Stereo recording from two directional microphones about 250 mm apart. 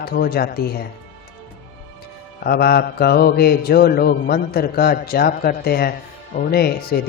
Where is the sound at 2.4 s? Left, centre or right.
Left.